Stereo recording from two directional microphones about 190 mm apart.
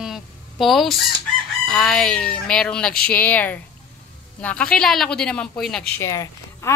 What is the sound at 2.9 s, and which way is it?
Speech, 50° left (ahead or behind).